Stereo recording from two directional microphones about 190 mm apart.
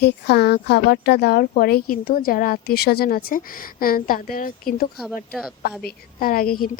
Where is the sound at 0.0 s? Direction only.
60° left (ahead or behind).